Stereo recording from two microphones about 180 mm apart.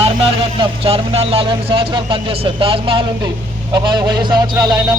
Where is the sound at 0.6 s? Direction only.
35° right (ahead or behind).